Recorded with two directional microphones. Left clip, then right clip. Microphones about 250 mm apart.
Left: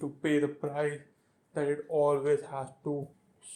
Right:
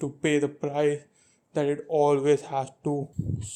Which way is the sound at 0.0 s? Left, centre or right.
Right.